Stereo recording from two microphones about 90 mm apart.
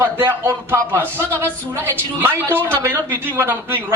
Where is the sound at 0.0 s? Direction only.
25° right (ahead or behind).